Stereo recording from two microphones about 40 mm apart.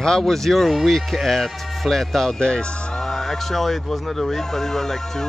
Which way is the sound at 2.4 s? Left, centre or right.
Left.